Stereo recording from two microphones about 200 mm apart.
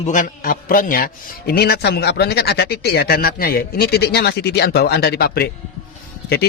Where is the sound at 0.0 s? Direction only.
40° left (ahead or behind).